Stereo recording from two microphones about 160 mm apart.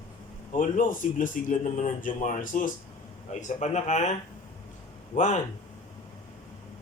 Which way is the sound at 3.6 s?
45° left (ahead or behind).